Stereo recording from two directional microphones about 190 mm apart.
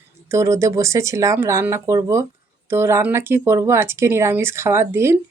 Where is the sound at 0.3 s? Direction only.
15° right (ahead or behind).